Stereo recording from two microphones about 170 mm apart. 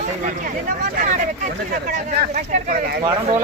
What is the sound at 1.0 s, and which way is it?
Speech, 45° right (ahead or behind).